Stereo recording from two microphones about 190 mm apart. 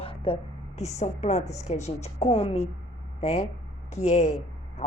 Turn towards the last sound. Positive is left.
turn(degrees=35)  # may be behind; listen again after turning